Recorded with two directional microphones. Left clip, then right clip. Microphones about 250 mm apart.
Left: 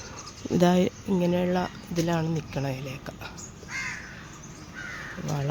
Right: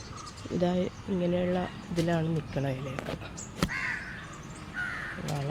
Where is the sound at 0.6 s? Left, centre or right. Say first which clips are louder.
Left 7 dB; left; by 2.7 s centre.